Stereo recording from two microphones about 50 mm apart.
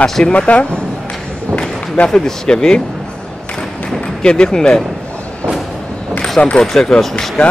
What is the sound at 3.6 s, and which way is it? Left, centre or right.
Thump, centre.